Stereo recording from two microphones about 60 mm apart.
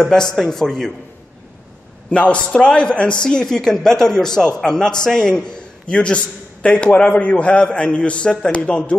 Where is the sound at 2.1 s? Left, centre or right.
Centre.